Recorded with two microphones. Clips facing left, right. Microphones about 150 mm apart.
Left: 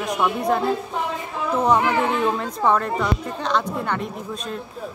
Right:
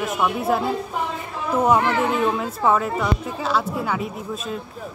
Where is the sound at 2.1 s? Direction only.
5° right (ahead or behind).